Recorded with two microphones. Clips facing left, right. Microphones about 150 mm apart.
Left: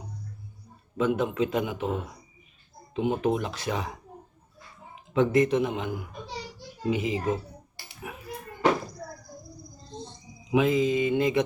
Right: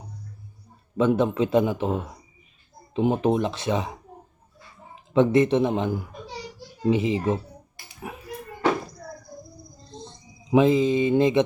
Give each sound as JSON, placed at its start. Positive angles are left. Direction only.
{"t": 0.9, "sound": "a man's voice", "side_deg": -30}
{"t": 5.1, "sound": "a man's voice", "side_deg": -25}
{"t": 10.5, "sound": "a man's voice", "side_deg": -30}